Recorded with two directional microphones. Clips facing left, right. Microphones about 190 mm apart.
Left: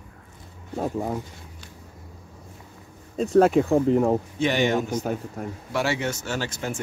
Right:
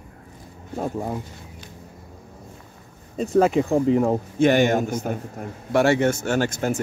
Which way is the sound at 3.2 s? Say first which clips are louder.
Left 1 dB; centre (ahead or behind).